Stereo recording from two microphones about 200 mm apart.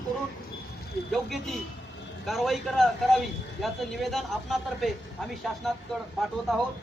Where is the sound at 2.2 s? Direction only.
Centre (ahead or behind).